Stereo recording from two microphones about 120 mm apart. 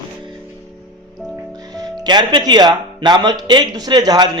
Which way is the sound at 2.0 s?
35° right (ahead or behind).